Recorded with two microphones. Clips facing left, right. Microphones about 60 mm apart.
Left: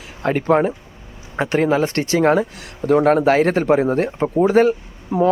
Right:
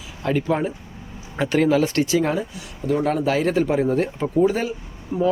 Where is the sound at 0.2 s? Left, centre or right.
Left.